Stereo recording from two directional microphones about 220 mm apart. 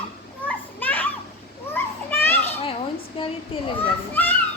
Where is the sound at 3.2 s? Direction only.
25° left (ahead or behind).